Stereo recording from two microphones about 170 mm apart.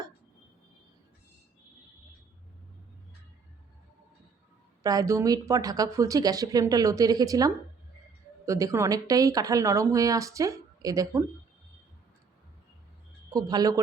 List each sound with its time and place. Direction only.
4.8 s speech: 20° right (ahead or behind)
13.3 s speech: 20° right (ahead or behind)